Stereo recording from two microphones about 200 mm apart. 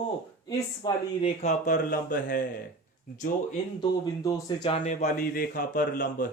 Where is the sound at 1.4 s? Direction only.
40° left (ahead or behind).